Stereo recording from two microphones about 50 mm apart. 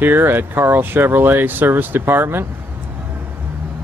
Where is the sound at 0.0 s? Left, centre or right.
Right.